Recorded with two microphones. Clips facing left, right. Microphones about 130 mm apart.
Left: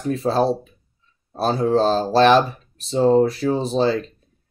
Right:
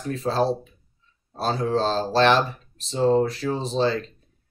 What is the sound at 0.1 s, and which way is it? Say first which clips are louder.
Speech: left 4 dB; 10° left (ahead or behind).